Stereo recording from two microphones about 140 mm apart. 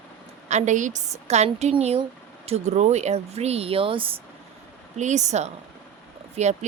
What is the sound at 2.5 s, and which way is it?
Speech, 50° right (ahead or behind).